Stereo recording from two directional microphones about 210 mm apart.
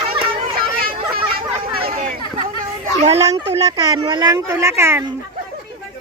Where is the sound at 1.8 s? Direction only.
40° right (ahead or behind).